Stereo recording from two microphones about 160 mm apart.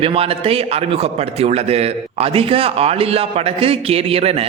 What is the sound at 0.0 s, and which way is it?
A man's voice, 35° right (ahead or behind).